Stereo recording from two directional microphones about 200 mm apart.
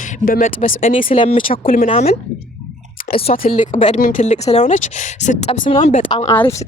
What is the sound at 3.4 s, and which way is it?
Speech, 35° left (ahead or behind).